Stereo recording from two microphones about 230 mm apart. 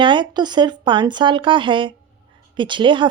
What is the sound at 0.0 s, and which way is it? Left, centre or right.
A woman's voice, centre.